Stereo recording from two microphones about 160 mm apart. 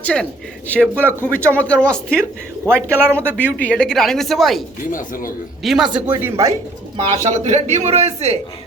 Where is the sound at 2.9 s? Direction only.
15° right (ahead or behind).